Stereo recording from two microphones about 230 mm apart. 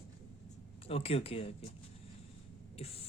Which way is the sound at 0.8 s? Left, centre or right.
Left.